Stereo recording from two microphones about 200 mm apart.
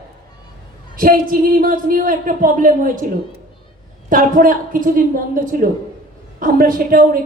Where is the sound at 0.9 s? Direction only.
45° right (ahead or behind).